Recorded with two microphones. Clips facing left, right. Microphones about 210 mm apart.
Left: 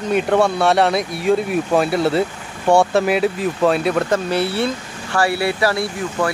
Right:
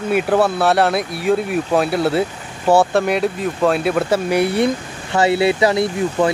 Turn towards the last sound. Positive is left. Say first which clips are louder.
# right 4 dB
turn(degrees=-20)  # may be behind; listen again after turning